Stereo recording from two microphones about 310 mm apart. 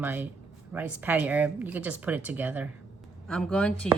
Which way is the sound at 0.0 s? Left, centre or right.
Centre.